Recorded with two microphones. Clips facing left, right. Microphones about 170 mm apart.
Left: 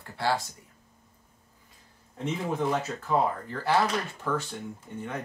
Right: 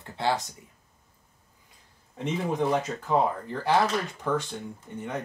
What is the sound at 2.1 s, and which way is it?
Speech, 15° right (ahead or behind).